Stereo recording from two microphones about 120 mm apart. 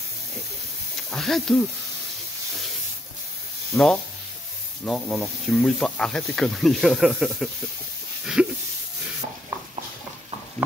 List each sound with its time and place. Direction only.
1.1 s speech: centre (ahead or behind)
3.7 s speech: 5° left (ahead or behind)
8.4 s a sound: 5° right (ahead or behind)